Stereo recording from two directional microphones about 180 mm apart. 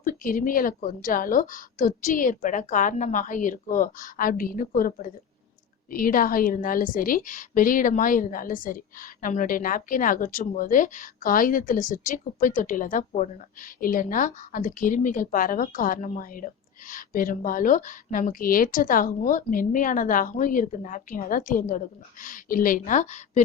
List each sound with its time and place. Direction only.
0.0 s a woman's voice: 50° left (ahead or behind)